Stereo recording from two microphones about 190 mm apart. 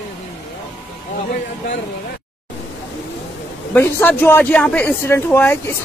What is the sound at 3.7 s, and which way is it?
Speech, 10° left (ahead or behind).